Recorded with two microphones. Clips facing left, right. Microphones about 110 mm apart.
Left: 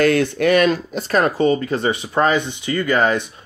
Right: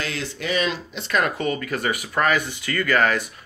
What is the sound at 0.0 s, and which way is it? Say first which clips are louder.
Speech: left 14 dB; 55° left (ahead or behind).